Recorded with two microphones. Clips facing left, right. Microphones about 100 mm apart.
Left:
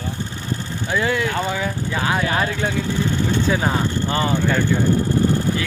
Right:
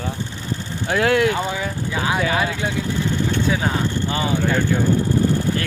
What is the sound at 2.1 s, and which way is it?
Speech, 10° right (ahead or behind).